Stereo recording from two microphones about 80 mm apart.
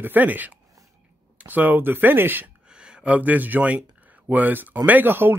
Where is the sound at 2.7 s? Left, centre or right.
Centre.